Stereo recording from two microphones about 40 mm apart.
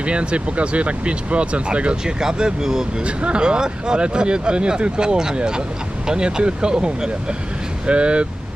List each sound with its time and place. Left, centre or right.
0.0 s speech: right
3.0 s speech: right